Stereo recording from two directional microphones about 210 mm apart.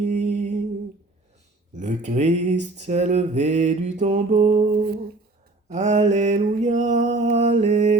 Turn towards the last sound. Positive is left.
turn(degrees=-35)  # may be behind; listen again after turning